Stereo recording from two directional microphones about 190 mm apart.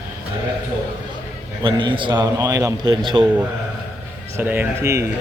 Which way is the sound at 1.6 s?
25° right (ahead or behind).